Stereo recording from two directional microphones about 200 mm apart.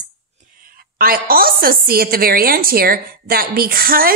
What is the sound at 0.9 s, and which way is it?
A woman's voice, 45° right (ahead or behind).